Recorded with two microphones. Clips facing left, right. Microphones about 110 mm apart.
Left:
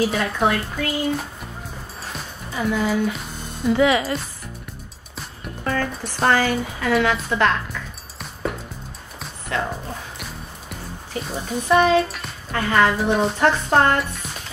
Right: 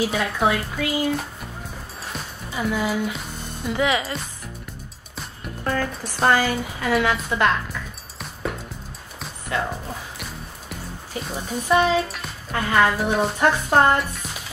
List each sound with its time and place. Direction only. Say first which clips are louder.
0.0 s speech: left 1 dB; centre (ahead or behind)
3.9 s speech: left 3 dB; 30° left (ahead or behind)
5.1 s music: even; centre (ahead or behind)
6.3 s a woman's voice: left 1 dB; 10° right (ahead or behind)
8.2 s music: left 2 dB; centre (ahead or behind)
11.2 s speech: left 2 dB; centre (ahead or behind)